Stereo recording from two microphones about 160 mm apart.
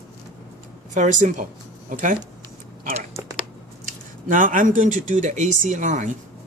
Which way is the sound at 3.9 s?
55° right (ahead or behind).